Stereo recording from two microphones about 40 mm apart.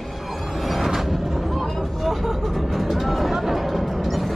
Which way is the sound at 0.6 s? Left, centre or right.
Centre.